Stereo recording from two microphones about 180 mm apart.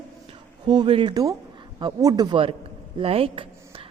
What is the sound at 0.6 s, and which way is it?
Speech, 25° right (ahead or behind).